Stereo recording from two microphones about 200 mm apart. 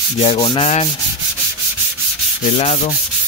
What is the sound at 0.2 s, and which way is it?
Sanding, 30° left (ahead or behind).